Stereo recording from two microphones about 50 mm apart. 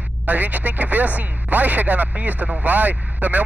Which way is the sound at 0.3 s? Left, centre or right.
Right.